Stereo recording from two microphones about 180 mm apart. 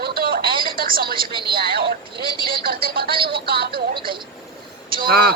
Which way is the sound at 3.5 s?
60° right (ahead or behind).